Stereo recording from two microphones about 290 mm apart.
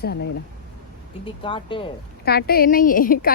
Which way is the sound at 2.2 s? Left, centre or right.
Left.